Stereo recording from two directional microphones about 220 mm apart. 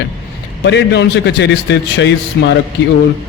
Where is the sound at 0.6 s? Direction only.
50° left (ahead or behind).